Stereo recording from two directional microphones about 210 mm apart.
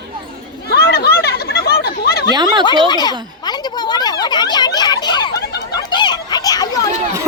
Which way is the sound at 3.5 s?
20° left (ahead or behind).